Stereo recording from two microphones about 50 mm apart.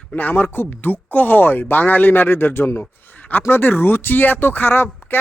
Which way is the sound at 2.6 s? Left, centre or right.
Left.